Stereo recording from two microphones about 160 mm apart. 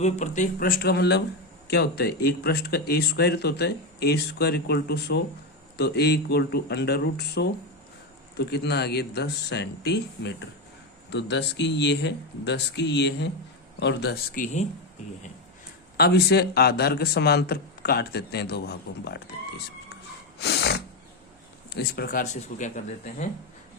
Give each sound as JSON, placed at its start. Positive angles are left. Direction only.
{"t": 0.0, "sound": "speech", "side_deg": 50}
{"t": 1.7, "sound": "speech", "side_deg": 80}
{"t": 14.4, "sound": "speech", "side_deg": 50}
{"t": 16.0, "sound": "speech", "side_deg": 90}
{"t": 20.4, "sound": "snort", "side_deg": 90}
{"t": 21.7, "sound": "speech", "side_deg": 80}